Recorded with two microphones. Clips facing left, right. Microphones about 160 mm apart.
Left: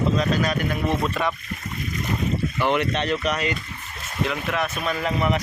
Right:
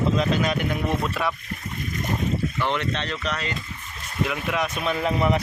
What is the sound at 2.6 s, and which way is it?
Speech, 10° left (ahead or behind).